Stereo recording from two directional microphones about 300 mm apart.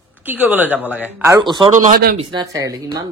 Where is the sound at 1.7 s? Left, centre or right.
Right; by 3.0 s centre.